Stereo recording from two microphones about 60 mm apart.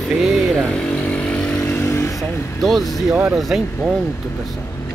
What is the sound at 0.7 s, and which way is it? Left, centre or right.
Vehicle, centre.